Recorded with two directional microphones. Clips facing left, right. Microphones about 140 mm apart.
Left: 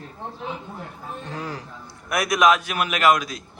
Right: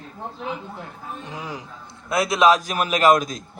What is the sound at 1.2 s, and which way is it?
A man's voice, 20° right (ahead or behind).